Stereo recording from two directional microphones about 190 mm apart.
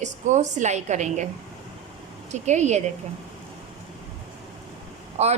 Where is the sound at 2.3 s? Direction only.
35° right (ahead or behind).